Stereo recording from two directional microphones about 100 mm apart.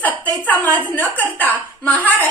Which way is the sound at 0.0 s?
15° left (ahead or behind).